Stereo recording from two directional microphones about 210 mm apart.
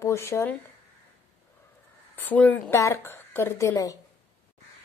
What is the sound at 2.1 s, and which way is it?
A woman's voice, 10° left (ahead or behind).